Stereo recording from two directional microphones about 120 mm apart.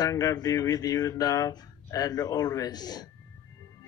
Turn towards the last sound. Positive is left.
turn(degrees=35)  # may be behind; listen again after turning